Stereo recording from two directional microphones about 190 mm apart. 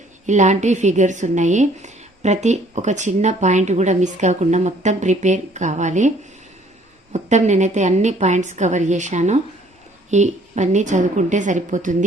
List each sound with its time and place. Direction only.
0.3 s speech: 40° right (ahead or behind)